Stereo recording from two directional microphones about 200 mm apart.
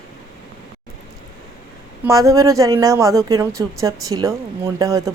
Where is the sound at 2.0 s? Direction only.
15° right (ahead or behind).